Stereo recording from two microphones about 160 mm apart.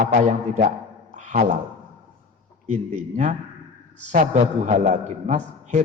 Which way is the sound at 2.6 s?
45° right (ahead or behind).